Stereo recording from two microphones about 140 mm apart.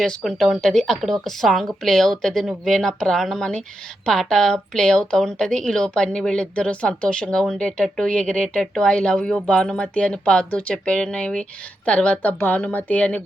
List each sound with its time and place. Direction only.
0.0 s a woman's voice: 5° left (ahead or behind)